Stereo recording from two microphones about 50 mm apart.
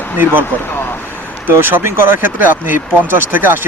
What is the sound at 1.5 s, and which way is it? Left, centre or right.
Speech, right.